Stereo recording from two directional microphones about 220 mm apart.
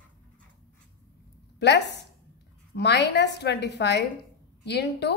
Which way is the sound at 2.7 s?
50° left (ahead or behind).